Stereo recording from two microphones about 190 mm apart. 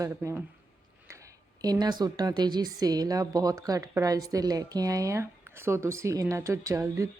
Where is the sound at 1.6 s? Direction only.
20° right (ahead or behind).